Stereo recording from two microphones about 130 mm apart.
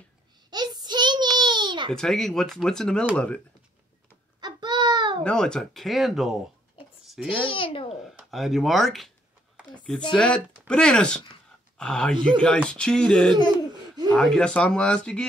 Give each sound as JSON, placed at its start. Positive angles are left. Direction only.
{"t": 0.5, "sound": "a sound", "side_deg": -30}
{"t": 1.9, "sound": "speech", "side_deg": 5}
{"t": 4.4, "sound": "baby cry", "side_deg": -35}
{"t": 5.2, "sound": "speech", "side_deg": 5}
{"t": 7.1, "sound": "babbling", "side_deg": -10}
{"t": 7.4, "sound": "a child's voice", "side_deg": 45}
{"t": 8.3, "sound": "speech", "side_deg": 0}
{"t": 10.1, "sound": "speech", "side_deg": 5}